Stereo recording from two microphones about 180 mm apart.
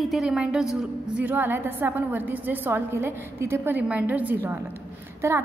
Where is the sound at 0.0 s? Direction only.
Centre (ahead or behind).